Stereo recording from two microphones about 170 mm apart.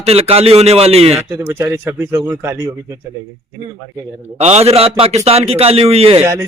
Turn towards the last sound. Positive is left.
turn(degrees=-15)  # may be behind; listen again after turning